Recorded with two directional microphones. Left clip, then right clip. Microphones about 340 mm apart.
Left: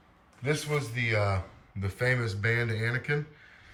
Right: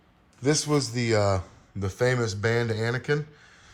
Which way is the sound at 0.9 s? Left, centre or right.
Centre.